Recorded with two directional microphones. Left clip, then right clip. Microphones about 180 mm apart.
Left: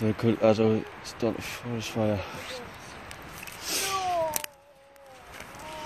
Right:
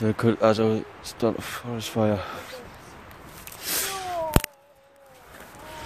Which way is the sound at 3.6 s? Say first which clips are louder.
Right 1 dB; 35° right (ahead or behind).